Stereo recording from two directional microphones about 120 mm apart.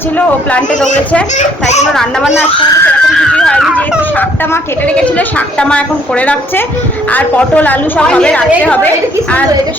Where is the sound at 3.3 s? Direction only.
5° left (ahead or behind).